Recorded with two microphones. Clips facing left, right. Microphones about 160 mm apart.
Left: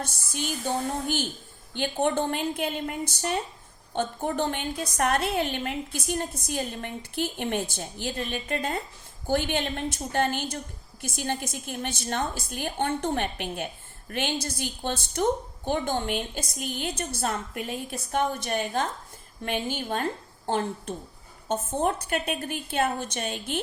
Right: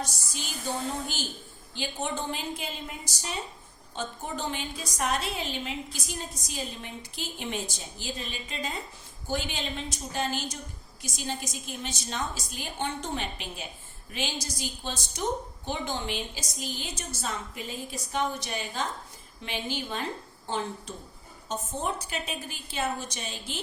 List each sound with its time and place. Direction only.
0.0 s a woman's voice: 55° left (ahead or behind)